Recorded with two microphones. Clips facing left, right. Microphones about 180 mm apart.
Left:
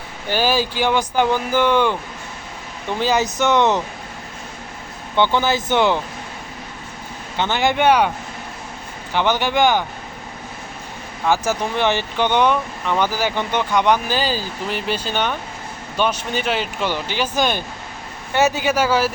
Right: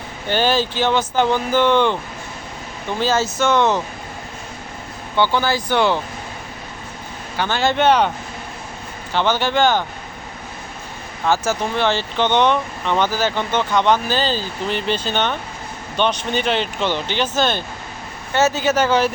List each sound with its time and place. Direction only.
0.3 s speech: 10° left (ahead or behind)
3.0 s speech: 15° left (ahead or behind)
5.1 s speech: 20° left (ahead or behind)
7.3 s speech: 20° left (ahead or behind)
9.1 s speech: 15° left (ahead or behind)
11.3 s speech: 15° left (ahead or behind)